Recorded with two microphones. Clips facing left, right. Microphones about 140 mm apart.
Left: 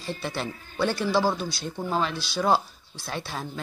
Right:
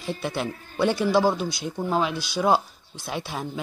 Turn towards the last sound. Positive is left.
turn(degrees=-10)  # may be behind; listen again after turning